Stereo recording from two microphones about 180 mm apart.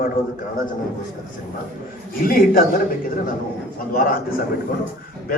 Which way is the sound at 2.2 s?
50° left (ahead or behind).